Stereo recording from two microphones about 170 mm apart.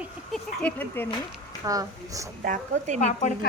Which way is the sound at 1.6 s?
20° right (ahead or behind).